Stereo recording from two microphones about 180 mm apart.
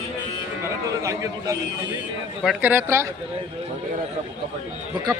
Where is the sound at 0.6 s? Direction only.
15° right (ahead or behind).